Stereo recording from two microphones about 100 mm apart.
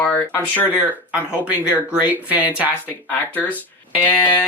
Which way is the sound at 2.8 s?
15° left (ahead or behind).